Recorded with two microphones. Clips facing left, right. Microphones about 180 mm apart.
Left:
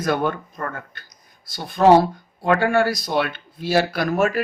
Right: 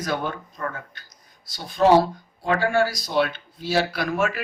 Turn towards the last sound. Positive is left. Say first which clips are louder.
# left 4 dB
turn(degrees=40)  # may be behind; listen again after turning